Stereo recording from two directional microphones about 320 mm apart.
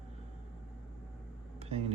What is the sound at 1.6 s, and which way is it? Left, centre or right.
Vehicle, centre.